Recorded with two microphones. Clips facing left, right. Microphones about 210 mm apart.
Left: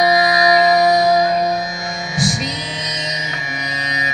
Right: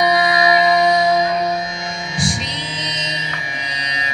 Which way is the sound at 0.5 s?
40° left (ahead or behind).